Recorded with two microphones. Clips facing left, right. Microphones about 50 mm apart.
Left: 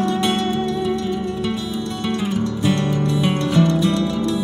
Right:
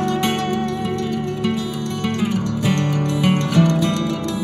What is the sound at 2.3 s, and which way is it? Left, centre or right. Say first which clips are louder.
Music: even; right.